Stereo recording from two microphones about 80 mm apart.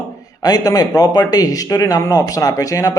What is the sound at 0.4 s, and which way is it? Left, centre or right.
Speech, left.